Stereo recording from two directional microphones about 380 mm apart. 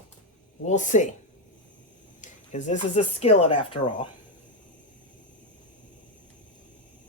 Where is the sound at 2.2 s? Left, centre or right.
Centre.